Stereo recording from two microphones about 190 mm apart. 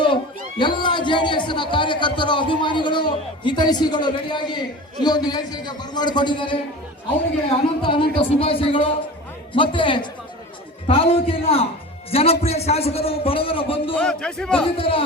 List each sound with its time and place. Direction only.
0.6 s a man's voice: 25° left (ahead or behind)
7.8 s a man's voice: 25° left (ahead or behind)
13.9 s a man's voice: 5° left (ahead or behind)
14.6 s a man's voice: 30° left (ahead or behind)